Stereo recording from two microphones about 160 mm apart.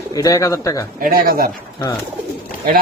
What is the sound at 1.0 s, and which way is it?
Speech, 65° right (ahead or behind).